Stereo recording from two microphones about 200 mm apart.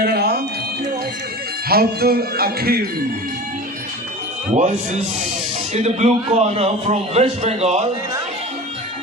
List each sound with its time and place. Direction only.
0.0 s a sound: 50° right (ahead or behind)
1.6 s speech: 50° right (ahead or behind)
4.5 s a man's voice: 35° right (ahead or behind)